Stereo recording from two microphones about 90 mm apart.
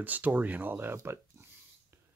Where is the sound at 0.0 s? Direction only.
20° right (ahead or behind).